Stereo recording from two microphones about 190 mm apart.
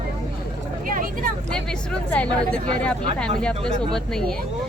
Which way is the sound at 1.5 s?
5° left (ahead or behind).